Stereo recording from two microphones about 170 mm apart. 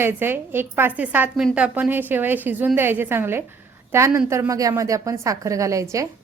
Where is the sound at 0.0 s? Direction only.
10° right (ahead or behind).